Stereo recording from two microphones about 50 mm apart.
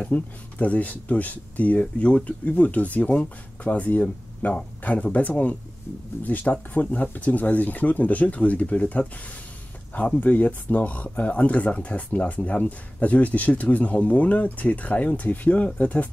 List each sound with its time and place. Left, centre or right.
0.1 s speech: left